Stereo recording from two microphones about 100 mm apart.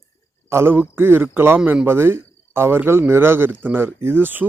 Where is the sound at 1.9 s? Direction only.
25° right (ahead or behind).